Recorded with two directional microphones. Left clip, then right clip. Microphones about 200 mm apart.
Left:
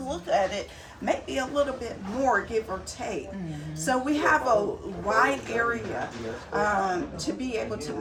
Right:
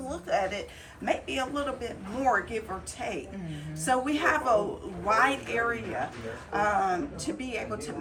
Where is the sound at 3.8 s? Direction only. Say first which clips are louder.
Left 2 dB; 20° left (ahead or behind).